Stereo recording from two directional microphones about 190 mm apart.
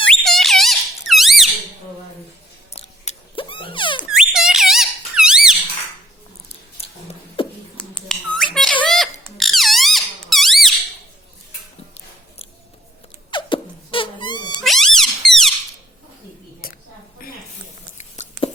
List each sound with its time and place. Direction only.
0.1 s squeak: centre (ahead or behind)
2.7 s a sound: 35° left (ahead or behind)
4.1 s squeak: 5° right (ahead or behind)
6.7 s a sound: 30° left (ahead or behind)
7.9 s squawk: centre (ahead or behind)
8.8 s oink: centre (ahead or behind)
9.2 s squeak: centre (ahead or behind)
13.3 s beatboxing: 25° left (ahead or behind)
14.5 s music: centre (ahead or behind)
17.9 s a sound: 35° left (ahead or behind)